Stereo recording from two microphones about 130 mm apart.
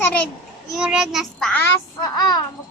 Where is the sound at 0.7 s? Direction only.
5° right (ahead or behind).